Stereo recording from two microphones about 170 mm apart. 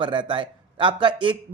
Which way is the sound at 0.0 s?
30° right (ahead or behind).